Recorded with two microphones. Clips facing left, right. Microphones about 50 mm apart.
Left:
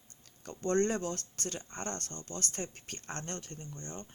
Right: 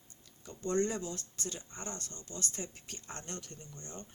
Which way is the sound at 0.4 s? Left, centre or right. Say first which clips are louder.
Left 3 dB; left.